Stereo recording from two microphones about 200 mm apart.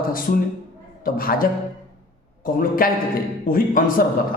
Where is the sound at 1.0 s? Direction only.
45° left (ahead or behind).